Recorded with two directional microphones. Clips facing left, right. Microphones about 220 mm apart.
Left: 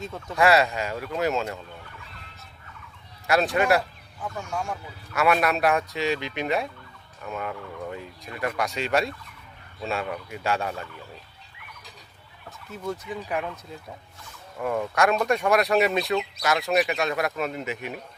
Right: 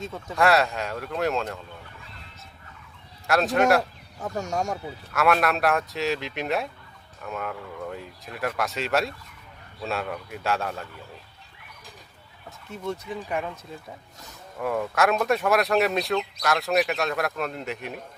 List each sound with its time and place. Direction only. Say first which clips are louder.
0.0 s speech: left 1 dB; centre (ahead or behind)
3.2 s speech: right 1 dB; centre (ahead or behind)
4.2 s speech: right 4 dB; 40° right (ahead or behind)
5.1 s speech: even; centre (ahead or behind)
12.5 s speech: even; centre (ahead or behind)
14.6 s speech: even; centre (ahead or behind)